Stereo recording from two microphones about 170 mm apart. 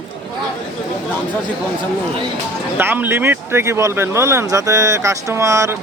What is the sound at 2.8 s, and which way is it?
Speech, 10° right (ahead or behind).